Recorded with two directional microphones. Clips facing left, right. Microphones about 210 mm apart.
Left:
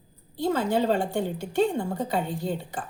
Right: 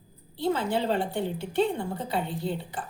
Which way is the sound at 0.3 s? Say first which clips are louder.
Left 2 dB; 45° left (ahead or behind).